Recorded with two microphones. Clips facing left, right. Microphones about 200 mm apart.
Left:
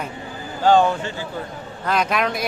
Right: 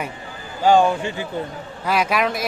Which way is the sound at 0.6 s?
10° right (ahead or behind).